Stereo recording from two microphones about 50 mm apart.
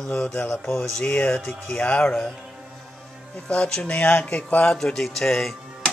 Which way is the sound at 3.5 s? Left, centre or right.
Centre.